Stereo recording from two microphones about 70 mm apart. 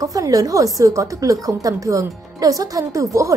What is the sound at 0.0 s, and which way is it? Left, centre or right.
A woman's voice, right.